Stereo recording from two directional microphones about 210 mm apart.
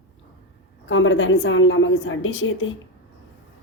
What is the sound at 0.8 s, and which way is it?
A woman's voice, 65° left (ahead or behind).